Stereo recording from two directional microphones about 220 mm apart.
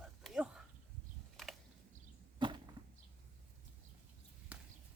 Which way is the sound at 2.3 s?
20° right (ahead or behind).